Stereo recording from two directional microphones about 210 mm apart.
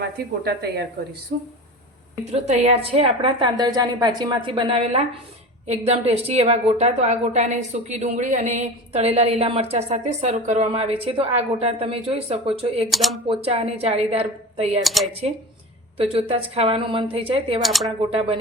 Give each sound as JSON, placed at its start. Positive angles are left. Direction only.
{"t": 0.4, "sound": "speech", "side_deg": -50}
{"t": 2.3, "sound": "a woman's voice", "side_deg": -30}
{"t": 12.9, "sound": "speech", "side_deg": 0}
{"t": 13.2, "sound": "a woman's voice", "side_deg": -25}
{"t": 14.8, "sound": "speech", "side_deg": 0}
{"t": 16.0, "sound": "a woman's voice", "side_deg": -25}
{"t": 17.6, "sound": "speech", "side_deg": 0}
{"t": 18.1, "sound": "a woman's voice", "side_deg": -25}